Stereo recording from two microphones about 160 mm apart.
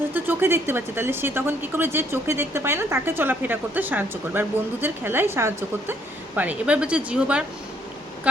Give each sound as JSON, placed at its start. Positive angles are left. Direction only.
{"t": 0.1, "sound": "speech", "side_deg": -10}